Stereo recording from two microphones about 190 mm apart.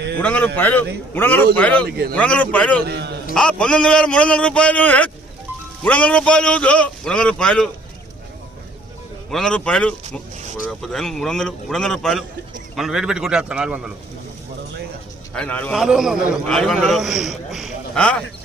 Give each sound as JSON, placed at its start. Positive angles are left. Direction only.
{"t": 0.2, "sound": "a man's voice", "side_deg": 10}
{"t": 2.8, "sound": "a man's voice", "side_deg": -60}
{"t": 3.3, "sound": "a man's voice", "side_deg": 5}
{"t": 9.3, "sound": "a man's voice", "side_deg": 5}
{"t": 15.4, "sound": "a man's voice", "side_deg": 10}